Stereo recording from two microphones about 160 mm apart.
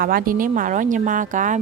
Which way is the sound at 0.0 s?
65° right (ahead or behind).